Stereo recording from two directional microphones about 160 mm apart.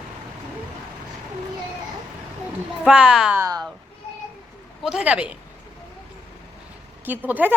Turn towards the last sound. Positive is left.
turn(degrees=-10)  # may be behind; listen again after turning